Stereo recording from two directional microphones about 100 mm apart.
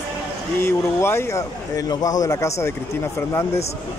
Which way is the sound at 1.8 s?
40° left (ahead or behind).